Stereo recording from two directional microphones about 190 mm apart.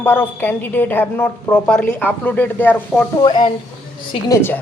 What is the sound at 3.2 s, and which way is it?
Speech, 25° left (ahead or behind).